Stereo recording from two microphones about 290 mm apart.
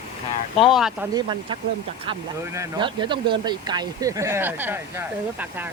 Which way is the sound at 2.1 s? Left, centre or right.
Centre.